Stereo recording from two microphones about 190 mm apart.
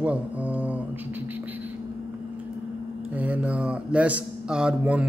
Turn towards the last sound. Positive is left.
turn(degrees=-5)  # may be behind; listen again after turning